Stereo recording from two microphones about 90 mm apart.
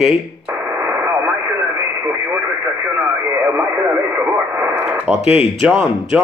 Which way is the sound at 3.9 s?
25° right (ahead or behind).